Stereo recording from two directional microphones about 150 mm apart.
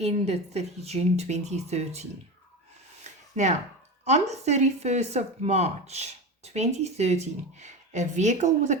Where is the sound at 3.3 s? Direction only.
50° right (ahead or behind).